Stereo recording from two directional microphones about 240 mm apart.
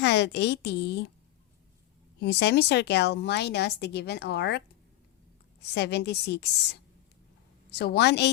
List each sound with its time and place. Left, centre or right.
0.0 s a woman's voice: left
2.2 s a woman's voice: left
7.7 s a woman's voice: left